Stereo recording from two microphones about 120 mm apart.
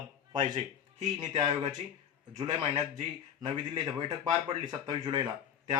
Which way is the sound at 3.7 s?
55° right (ahead or behind).